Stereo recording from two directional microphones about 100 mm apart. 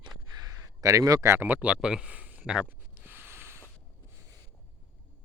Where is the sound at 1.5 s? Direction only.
10° right (ahead or behind).